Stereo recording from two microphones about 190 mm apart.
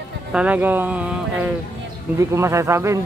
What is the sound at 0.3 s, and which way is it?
Speech, 5° right (ahead or behind).